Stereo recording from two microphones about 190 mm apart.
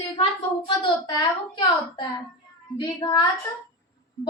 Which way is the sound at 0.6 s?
25° left (ahead or behind).